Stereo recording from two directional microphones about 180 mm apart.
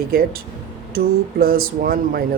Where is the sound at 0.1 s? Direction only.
55° right (ahead or behind).